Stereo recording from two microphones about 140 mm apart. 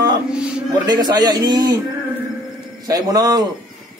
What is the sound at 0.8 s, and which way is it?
Speech, 30° right (ahead or behind).